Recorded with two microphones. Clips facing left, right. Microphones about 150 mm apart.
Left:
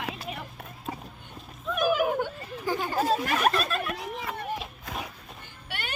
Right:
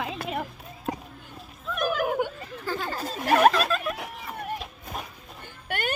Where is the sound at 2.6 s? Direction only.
15° left (ahead or behind).